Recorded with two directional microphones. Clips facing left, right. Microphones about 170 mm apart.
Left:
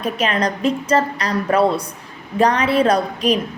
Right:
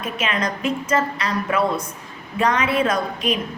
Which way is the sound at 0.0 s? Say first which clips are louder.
Left 4 dB; 35° left (ahead or behind).